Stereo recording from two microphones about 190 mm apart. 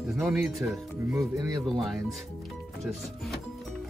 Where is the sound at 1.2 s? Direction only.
20° right (ahead or behind).